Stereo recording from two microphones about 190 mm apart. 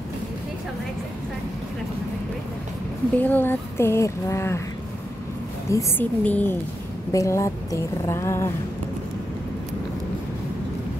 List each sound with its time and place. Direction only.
3.2 s speech: 10° left (ahead or behind)
5.7 s speech: 15° left (ahead or behind)